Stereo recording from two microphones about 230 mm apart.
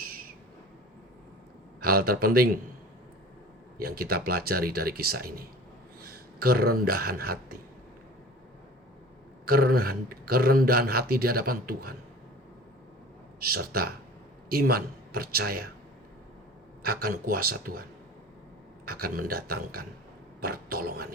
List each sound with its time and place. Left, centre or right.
1.8 s speech: right
3.8 s speech: right
9.5 s speech: right
13.5 s speech: right
16.8 s speech: right
18.9 s speech: right